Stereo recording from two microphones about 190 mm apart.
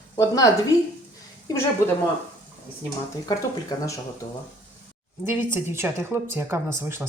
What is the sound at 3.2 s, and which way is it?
Speech, 20° left (ahead or behind).